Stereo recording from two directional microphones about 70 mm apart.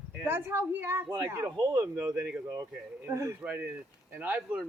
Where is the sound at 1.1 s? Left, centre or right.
Right.